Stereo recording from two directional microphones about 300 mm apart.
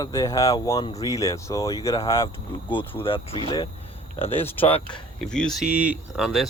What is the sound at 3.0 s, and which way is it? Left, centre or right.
Speech, centre.